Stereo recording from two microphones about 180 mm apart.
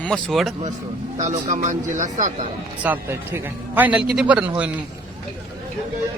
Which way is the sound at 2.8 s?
10° right (ahead or behind).